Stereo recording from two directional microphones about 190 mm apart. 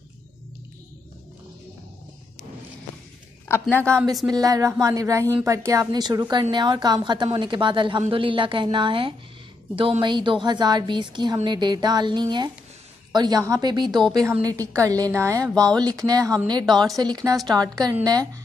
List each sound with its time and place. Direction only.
3.6 s a woman's voice: 5° left (ahead or behind)
3.9 s a woman's voice: 15° right (ahead or behind)